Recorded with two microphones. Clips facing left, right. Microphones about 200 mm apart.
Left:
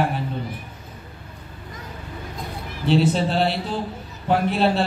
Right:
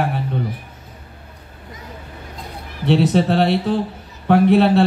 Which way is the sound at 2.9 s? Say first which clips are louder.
Right 4 dB; 65° right (ahead or behind).